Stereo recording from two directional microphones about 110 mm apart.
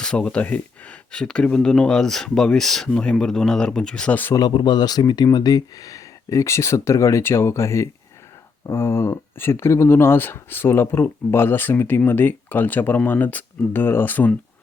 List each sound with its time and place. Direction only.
0.0 s speech: 10° left (ahead or behind)
4.4 s speech: 40° left (ahead or behind); by 14.3 s 15° left (ahead or behind)